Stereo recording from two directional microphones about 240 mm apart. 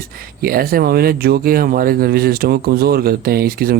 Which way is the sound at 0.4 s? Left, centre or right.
Right.